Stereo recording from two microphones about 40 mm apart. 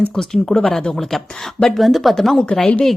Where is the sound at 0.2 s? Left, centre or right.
Centre.